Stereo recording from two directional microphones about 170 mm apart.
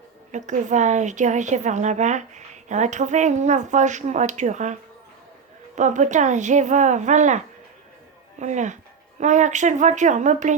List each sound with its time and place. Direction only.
0.3 s a woman's voice: 45° right (ahead or behind)